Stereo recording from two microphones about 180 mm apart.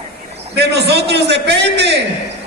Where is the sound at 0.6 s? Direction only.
65° right (ahead or behind).